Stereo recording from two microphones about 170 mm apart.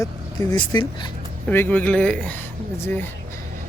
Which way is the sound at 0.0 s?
25° left (ahead or behind).